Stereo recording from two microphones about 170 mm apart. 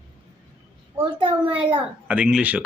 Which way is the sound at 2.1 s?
5° right (ahead or behind).